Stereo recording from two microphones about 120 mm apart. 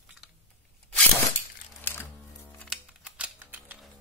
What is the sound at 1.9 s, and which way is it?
Music, 15° left (ahead or behind).